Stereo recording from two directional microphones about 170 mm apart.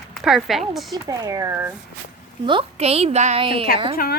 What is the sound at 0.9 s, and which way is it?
Speech, 20° right (ahead or behind).